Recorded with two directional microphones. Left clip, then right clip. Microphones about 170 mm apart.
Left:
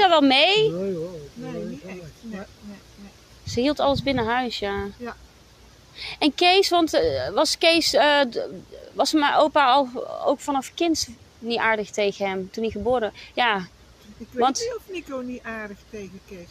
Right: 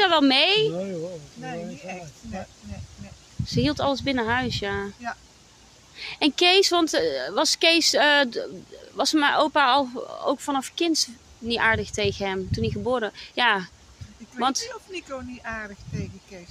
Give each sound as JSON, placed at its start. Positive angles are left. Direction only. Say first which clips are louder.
{"t": 0.0, "sound": "a woman's voice", "louder": "left 2 dB", "side_deg": -20}
{"t": 3.4, "sound": "speech", "louder": "left 3 dB", "side_deg": -20}